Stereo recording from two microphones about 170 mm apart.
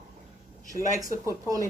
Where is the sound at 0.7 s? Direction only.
50° left (ahead or behind).